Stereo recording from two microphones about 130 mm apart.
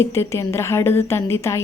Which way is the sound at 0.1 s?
20° left (ahead or behind).